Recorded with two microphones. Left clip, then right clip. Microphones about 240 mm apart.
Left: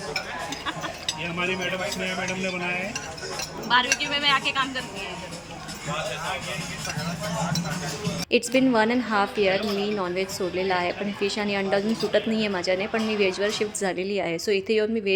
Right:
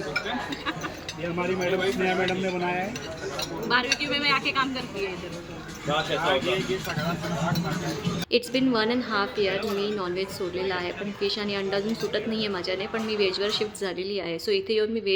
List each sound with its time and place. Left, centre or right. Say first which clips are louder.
3.7 s a woman's voice: left 3 dB; centre
8.3 s a woman's voice: left 3 dB; centre